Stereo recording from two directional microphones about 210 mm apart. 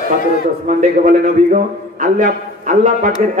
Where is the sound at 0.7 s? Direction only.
35° right (ahead or behind).